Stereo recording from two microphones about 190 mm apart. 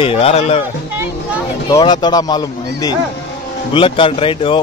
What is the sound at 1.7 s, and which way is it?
A man's voice, 20° left (ahead or behind).